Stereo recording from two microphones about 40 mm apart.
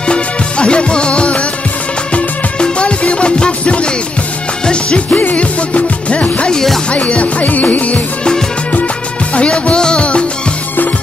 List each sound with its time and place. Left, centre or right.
0.0 s music: left
2.6 s music: left
5.1 s music: left
6.5 s music: centre
6.9 s music: left
9.3 s music: left